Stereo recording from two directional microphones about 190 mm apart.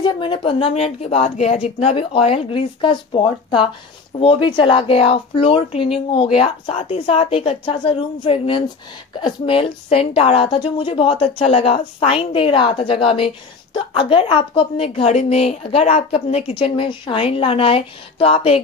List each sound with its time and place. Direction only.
0.0 s a woman's voice: 25° left (ahead or behind)